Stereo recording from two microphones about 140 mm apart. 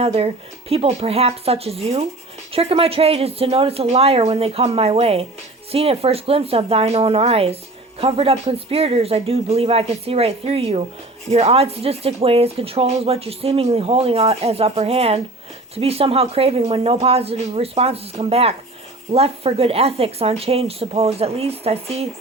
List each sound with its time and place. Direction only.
0.0 s speech: 45° right (ahead or behind)